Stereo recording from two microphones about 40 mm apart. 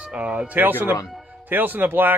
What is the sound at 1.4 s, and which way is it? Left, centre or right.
Speech, right.